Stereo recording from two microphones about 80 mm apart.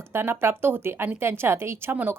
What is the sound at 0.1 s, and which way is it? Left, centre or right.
A woman's voice, right.